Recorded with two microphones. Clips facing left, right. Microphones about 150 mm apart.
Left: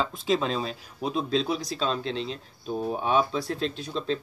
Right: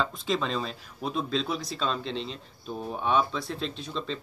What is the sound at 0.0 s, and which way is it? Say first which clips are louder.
Speech: left 3 dB; 5° left (ahead or behind).